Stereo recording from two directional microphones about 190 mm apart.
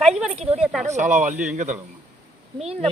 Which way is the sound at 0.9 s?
40° right (ahead or behind).